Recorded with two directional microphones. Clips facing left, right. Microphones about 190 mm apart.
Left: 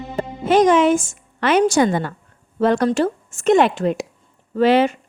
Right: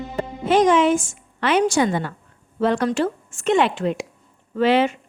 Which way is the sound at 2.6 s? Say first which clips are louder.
Left 3 dB; 45° left (ahead or behind).